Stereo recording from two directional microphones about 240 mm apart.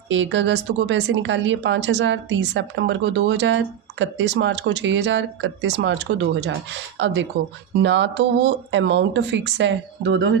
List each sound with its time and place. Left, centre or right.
0.1 s speech: right